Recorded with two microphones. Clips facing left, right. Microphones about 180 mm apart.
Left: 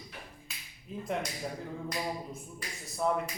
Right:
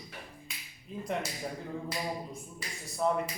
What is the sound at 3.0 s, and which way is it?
Speech, centre (ahead or behind).